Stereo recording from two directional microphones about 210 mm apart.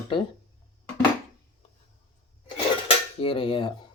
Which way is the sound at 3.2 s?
25° left (ahead or behind).